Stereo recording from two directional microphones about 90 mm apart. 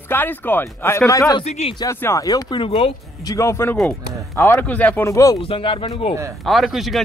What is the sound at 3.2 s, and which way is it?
Speech, 35° left (ahead or behind).